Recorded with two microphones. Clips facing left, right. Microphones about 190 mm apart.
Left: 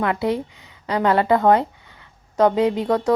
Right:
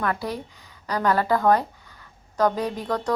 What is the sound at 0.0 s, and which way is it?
Speech, 20° left (ahead or behind).